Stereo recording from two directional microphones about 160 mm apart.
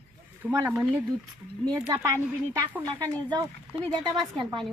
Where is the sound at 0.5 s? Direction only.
15° right (ahead or behind).